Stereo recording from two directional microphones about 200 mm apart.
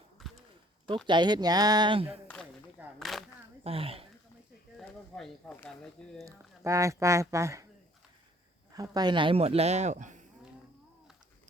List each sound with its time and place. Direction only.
0.2 s a sound: centre (ahead or behind)
1.0 s speech: 20° right (ahead or behind)
2.2 s a sound: 5° left (ahead or behind)
3.0 s speech: centre (ahead or behind)
3.6 s speech: 30° right (ahead or behind)
4.8 s speech: centre (ahead or behind)
6.2 s speech: 15° right (ahead or behind)
8.7 s speech: 20° right (ahead or behind); by 10.2 s 40° right (ahead or behind)